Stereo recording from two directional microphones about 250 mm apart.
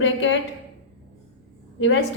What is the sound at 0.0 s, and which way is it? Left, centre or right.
Speech, left.